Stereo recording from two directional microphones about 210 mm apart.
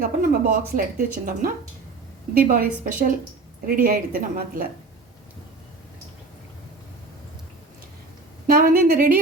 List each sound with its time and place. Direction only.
0.0 s speech: 45° right (ahead or behind)
8.4 s a woman's voice: 45° right (ahead or behind)